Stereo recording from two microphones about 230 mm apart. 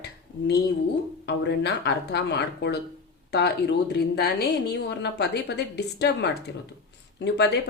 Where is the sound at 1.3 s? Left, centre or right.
Left.